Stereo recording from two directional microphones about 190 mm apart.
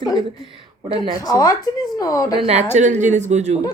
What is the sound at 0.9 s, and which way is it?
Speech, 20° left (ahead or behind).